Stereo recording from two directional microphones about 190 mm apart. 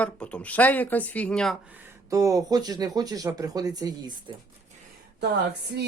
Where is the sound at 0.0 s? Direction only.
5° left (ahead or behind).